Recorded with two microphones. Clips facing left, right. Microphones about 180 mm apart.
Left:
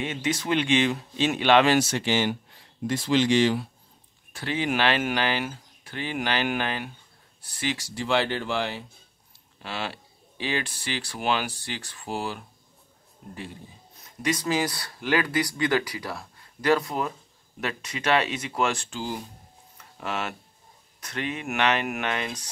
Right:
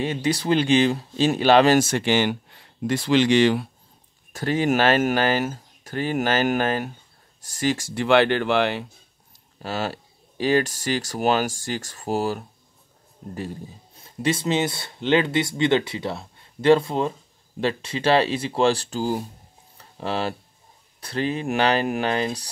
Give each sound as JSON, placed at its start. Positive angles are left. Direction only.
{"t": 0.0, "sound": "speech", "side_deg": -35}
{"t": 4.3, "sound": "speech", "side_deg": -45}
{"t": 9.6, "sound": "speech", "side_deg": -40}
{"t": 13.9, "sound": "speech", "side_deg": -30}